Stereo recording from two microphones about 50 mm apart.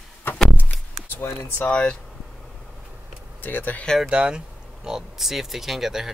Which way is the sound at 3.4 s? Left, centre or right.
Left.